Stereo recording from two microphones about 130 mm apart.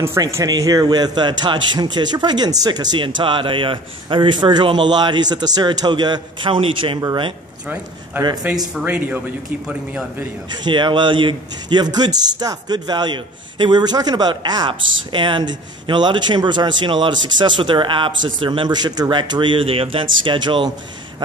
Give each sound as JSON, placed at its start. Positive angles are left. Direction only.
{"t": 0.0, "sound": "a man's voice", "side_deg": -20}
{"t": 7.6, "sound": "a man's voice", "side_deg": -10}
{"t": 8.2, "sound": "a man's voice", "side_deg": -35}
{"t": 8.8, "sound": "speech", "side_deg": -10}
{"t": 10.5, "sound": "a man's voice", "side_deg": -35}